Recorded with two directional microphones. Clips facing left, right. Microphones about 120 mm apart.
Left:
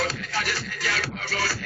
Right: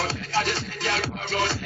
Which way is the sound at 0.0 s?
25° right (ahead or behind).